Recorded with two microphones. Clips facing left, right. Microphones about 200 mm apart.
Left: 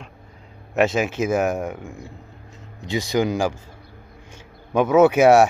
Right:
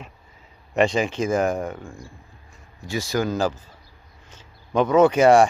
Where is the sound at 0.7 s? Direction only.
5° left (ahead or behind).